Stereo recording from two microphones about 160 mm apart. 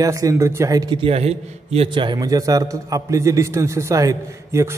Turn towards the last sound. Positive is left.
turn(degrees=-20)  # may be behind; listen again after turning